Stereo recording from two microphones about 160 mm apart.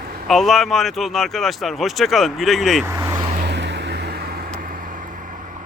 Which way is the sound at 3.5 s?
90° right.